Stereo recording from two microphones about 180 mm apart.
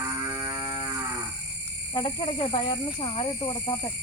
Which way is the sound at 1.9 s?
25° left (ahead or behind).